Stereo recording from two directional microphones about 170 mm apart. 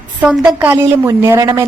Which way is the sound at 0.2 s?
10° right (ahead or behind).